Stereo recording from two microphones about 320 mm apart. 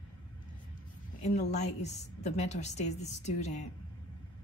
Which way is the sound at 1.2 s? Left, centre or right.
Left.